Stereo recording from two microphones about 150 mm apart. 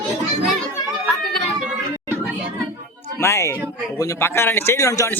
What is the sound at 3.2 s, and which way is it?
Speech, 20° left (ahead or behind).